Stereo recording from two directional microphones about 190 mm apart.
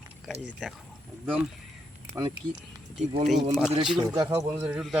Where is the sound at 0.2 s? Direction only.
Centre (ahead or behind).